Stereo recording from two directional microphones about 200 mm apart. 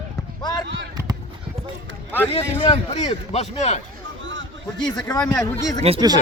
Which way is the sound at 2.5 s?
30° left (ahead or behind).